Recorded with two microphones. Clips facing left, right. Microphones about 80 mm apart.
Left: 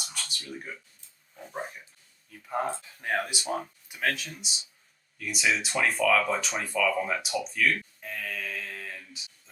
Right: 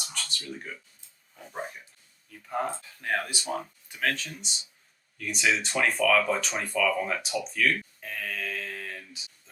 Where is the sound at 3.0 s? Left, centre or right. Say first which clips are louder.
Even; centre.